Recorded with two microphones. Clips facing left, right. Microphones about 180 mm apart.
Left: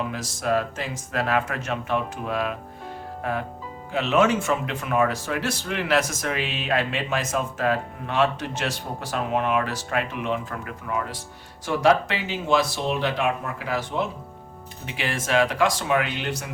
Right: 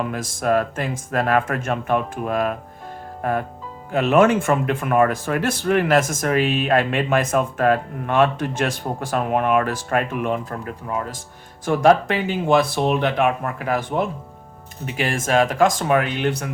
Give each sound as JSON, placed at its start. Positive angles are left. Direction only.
{"t": 0.1, "sound": "speech", "side_deg": -50}
{"t": 3.9, "sound": "speech", "side_deg": -50}
{"t": 11.6, "sound": "speech", "side_deg": -50}